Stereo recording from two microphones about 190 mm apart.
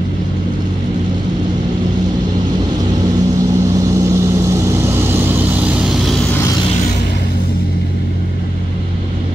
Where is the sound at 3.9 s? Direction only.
15° right (ahead or behind); by 6.2 s centre (ahead or behind).